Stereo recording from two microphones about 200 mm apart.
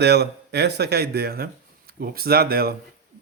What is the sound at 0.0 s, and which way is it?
Speech, 55° right (ahead or behind).